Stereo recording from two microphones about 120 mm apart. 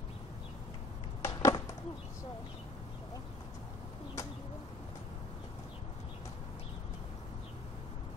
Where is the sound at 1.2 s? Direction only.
25° left (ahead or behind).